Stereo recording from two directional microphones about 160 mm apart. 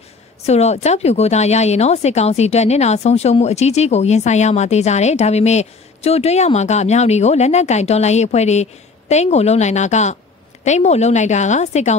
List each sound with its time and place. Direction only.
0.5 s speech: 45° left (ahead or behind)